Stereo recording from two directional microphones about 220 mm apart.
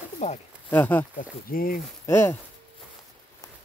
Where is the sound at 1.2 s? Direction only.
40° left (ahead or behind).